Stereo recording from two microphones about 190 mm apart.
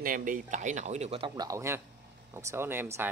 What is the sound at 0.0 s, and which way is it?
Speech, 45° right (ahead or behind).